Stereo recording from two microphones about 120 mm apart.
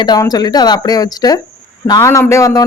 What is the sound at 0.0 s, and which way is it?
Speech, 35° left (ahead or behind).